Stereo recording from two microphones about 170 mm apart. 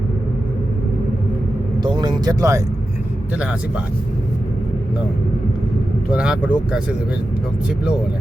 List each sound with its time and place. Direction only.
1.8 s speech: 25° right (ahead or behind)
6.1 s speech: 5° right (ahead or behind)